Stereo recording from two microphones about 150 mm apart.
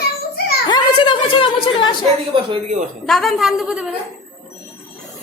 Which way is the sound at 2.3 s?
35° right (ahead or behind).